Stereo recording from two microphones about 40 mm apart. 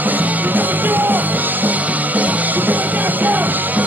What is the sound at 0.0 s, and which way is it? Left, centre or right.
Music, right.